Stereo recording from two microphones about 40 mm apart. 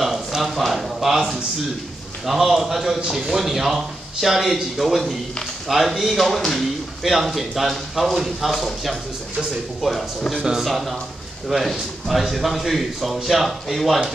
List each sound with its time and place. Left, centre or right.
0.0 s a sound: centre
2.2 s a man's voice: centre
7.1 s a man's voice: centre
10.3 s a man's voice: centre
10.6 s a man's voice: centre